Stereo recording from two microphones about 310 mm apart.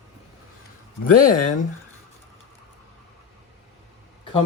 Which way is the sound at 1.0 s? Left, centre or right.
Left.